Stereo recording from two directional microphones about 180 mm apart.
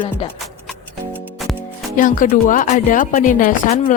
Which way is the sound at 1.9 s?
45° left (ahead or behind).